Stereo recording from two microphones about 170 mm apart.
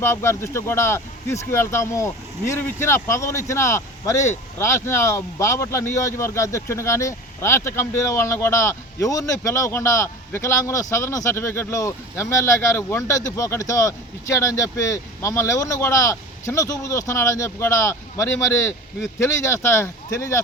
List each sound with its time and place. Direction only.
0.0 s speech: 15° left (ahead or behind)